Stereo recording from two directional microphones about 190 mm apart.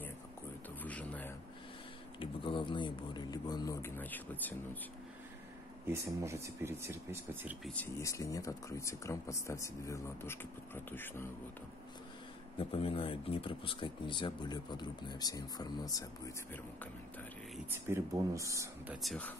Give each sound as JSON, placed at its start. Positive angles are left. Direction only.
{"t": 0.8, "sound": "a sound", "side_deg": 10}
{"t": 2.1, "sound": "speech", "side_deg": 25}
{"t": 6.2, "sound": "speech", "side_deg": -15}
{"t": 7.6, "sound": "speech", "side_deg": 10}
{"t": 12.5, "sound": "speech", "side_deg": 30}
{"t": 17.8, "sound": "speech", "side_deg": -15}
{"t": 19.0, "sound": "speech", "side_deg": 10}